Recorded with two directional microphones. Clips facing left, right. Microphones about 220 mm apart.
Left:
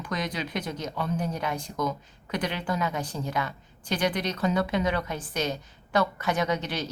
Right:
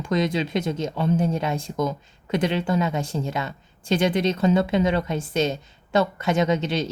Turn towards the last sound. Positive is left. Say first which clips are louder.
# right 6 dB
turn(degrees=-25)  # may be behind; listen again after turning